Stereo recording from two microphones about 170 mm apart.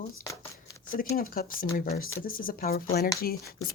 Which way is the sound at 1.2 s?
60° left (ahead or behind).